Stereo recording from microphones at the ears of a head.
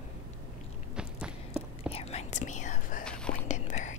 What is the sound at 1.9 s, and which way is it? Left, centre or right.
Whispering, left.